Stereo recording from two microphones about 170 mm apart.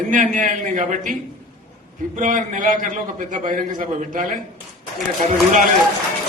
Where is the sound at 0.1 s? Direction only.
50° right (ahead or behind).